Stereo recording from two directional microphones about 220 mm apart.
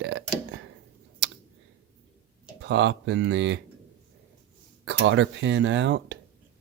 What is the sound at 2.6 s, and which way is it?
Speech, 55° right (ahead or behind).